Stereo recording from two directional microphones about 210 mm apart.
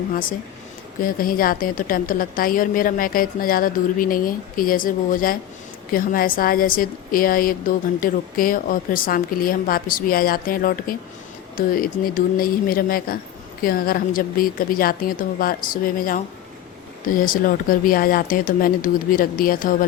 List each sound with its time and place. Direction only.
1.0 s a woman's voice: 40° left (ahead or behind)